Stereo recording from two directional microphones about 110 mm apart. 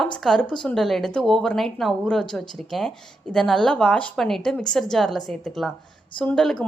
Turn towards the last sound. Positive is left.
turn(degrees=5)  # may be behind; listen again after turning